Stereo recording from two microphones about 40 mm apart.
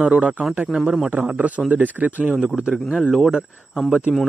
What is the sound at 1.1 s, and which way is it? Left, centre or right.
A man's voice, right.